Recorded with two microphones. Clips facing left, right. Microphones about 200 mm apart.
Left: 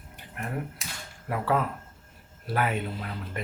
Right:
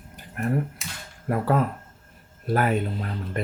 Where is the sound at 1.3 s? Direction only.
45° right (ahead or behind).